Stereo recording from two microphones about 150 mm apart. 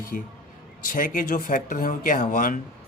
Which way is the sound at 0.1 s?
70° left (ahead or behind).